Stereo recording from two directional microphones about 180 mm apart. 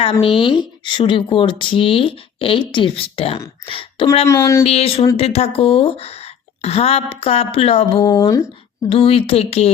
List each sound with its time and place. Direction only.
0.0 s speech: 30° left (ahead or behind)
4.3 s speech: 15° left (ahead or behind)
4.6 s speech: 35° left (ahead or behind); by 8.4 s 20° left (ahead or behind)
8.9 s speech: 30° left (ahead or behind)